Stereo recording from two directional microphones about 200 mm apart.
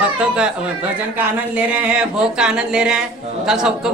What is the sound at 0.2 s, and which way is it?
Speech, 5° right (ahead or behind).